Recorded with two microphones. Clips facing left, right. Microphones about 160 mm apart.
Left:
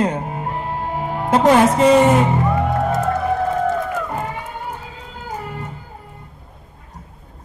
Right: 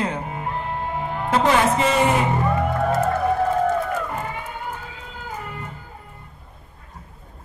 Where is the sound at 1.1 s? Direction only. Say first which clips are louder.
Left 6 dB; 40° left (ahead or behind).